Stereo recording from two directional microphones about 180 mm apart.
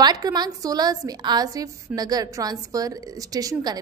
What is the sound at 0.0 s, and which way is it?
A woman's voice, 20° right (ahead or behind).